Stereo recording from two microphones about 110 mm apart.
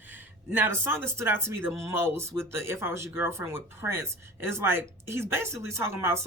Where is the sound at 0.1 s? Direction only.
20° right (ahead or behind).